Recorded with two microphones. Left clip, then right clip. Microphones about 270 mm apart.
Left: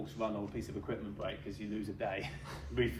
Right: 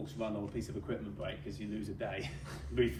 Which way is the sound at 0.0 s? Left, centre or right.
Left.